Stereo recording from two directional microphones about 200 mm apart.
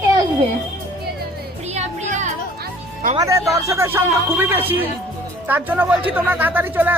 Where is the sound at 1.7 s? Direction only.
35° right (ahead or behind).